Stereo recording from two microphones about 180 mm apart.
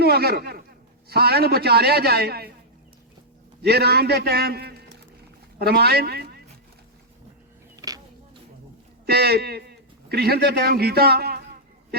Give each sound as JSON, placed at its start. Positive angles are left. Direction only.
{"t": 0.0, "sound": "a man's voice", "side_deg": -60}
{"t": 3.6, "sound": "a man's voice", "side_deg": -60}
{"t": 7.8, "sound": "vehicle", "side_deg": -20}
{"t": 9.0, "sound": "a man's voice", "side_deg": -60}